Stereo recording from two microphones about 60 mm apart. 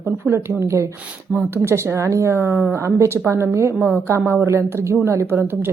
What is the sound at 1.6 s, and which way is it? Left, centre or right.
A woman's voice, right.